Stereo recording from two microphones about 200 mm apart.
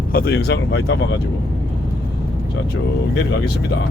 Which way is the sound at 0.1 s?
50° left (ahead or behind).